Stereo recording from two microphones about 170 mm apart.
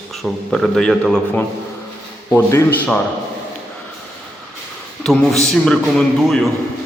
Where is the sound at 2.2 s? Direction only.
15° left (ahead or behind).